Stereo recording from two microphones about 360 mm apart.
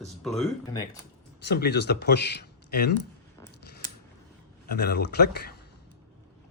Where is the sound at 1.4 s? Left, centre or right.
Left.